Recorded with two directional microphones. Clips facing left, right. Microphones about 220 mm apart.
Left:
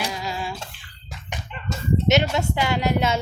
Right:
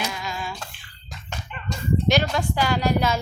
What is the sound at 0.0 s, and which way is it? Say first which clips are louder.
Humming: left 2 dB; 35° left (ahead or behind).